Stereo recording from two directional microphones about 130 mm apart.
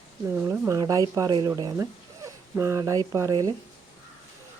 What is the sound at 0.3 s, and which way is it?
Speech, 15° right (ahead or behind).